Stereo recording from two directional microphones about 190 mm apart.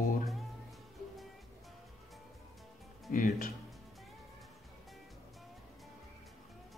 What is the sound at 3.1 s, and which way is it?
Speech, 45° left (ahead or behind).